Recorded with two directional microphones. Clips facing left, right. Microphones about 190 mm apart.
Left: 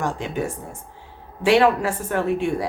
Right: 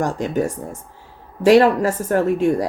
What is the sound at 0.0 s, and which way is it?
A woman's voice, 40° right (ahead or behind).